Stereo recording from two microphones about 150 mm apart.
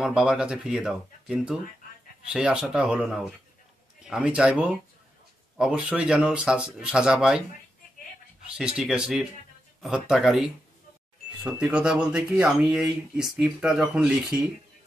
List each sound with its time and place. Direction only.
0.0 s speech: 5° right (ahead or behind)
8.5 s speech: 5° right (ahead or behind)
11.6 s speech: 5° right (ahead or behind)